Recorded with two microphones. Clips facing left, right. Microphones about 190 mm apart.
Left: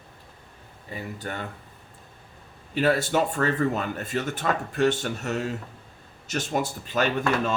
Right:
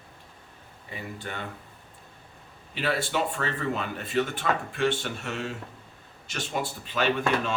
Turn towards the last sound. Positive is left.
turn(degrees=45)  # may be behind; listen again after turning